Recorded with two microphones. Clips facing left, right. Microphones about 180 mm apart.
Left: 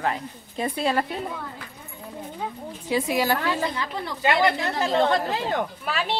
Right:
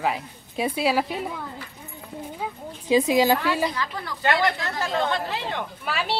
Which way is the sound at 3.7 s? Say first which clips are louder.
Left 1 dB; 25° left (ahead or behind).